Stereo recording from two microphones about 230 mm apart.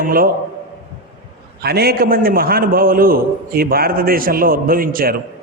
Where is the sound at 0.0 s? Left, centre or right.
Right.